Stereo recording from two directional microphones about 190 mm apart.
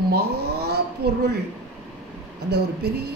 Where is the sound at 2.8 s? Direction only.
60° right (ahead or behind).